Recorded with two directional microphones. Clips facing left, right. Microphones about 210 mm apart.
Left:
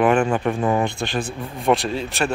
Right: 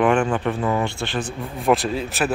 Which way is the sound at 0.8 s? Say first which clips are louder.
Left 2 dB; 15° left (ahead or behind).